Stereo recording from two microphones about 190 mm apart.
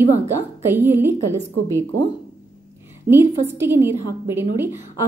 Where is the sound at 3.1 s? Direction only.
50° right (ahead or behind).